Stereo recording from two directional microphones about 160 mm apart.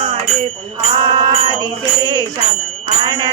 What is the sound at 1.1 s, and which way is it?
Jingle bell, 25° right (ahead or behind).